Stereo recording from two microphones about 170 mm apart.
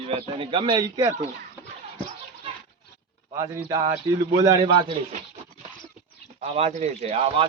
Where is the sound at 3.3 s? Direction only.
20° right (ahead or behind).